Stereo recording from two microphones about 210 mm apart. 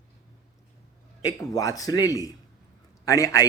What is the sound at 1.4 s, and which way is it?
Speech, 15° left (ahead or behind).